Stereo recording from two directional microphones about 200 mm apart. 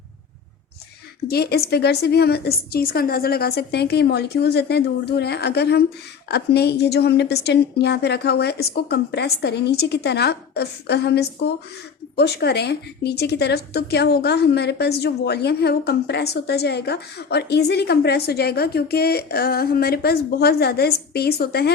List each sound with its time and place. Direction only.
1.3 s a woman's voice: 50° left (ahead or behind)